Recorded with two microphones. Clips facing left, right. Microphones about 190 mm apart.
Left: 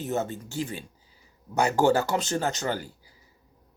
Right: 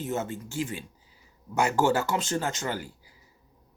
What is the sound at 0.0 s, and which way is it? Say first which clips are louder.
Speech: left 2 dB; 35° left (ahead or behind).